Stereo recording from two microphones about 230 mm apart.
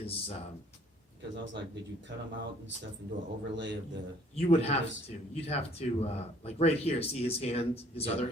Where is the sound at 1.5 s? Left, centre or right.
Right.